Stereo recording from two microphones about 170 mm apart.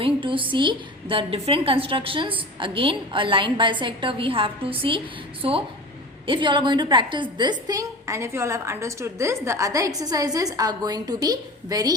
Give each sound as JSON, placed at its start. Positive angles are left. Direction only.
{"t": 0.0, "sound": "a woman's voice", "side_deg": -30}